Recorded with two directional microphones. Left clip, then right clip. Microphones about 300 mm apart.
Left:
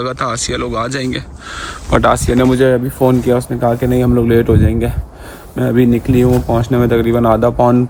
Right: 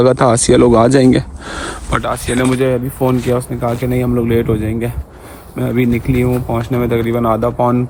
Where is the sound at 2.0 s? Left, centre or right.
Left.